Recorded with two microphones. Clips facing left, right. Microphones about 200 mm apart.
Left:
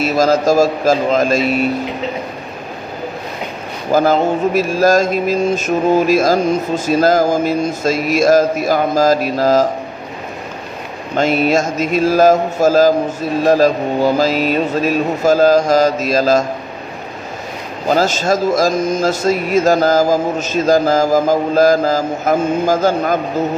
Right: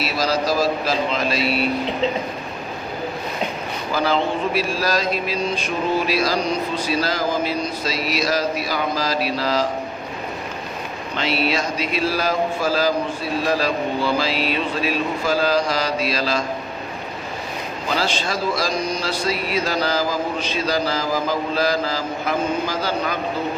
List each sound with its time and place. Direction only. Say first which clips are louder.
0.0 s mantra: left 8 dB; 45° left (ahead or behind)
3.9 s mantra: left 8 dB; 45° left (ahead or behind)
11.1 s mantra: left 8 dB; 45° left (ahead or behind)
17.8 s mantra: left 10 dB; 45° left (ahead or behind)